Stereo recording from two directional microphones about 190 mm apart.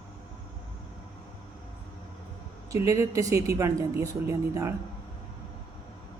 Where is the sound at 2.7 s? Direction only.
15° right (ahead or behind).